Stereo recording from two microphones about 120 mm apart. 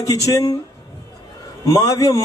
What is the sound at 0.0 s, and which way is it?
Speech, 30° left (ahead or behind).